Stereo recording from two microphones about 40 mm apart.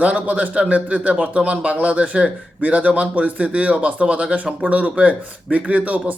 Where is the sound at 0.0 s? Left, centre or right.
Right.